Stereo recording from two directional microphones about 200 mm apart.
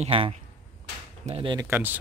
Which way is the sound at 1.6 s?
10° right (ahead or behind).